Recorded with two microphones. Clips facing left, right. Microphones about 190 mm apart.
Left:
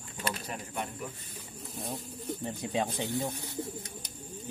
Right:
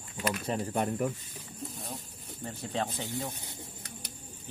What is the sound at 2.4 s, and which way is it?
Speech, 15° left (ahead or behind).